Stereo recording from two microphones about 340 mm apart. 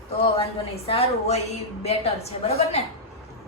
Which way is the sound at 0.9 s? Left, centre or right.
Centre.